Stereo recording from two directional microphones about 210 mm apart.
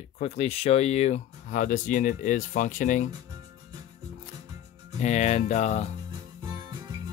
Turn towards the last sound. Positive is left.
turn(degrees=-20)  # may be behind; listen again after turning